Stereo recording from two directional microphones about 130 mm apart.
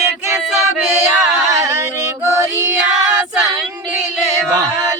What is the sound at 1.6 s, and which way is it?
Female singing, 20° right (ahead or behind).